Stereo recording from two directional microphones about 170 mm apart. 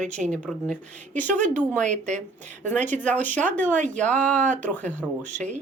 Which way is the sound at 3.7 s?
45° right (ahead or behind).